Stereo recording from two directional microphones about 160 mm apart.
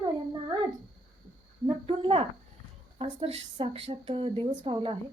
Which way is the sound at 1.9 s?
35° right (ahead or behind).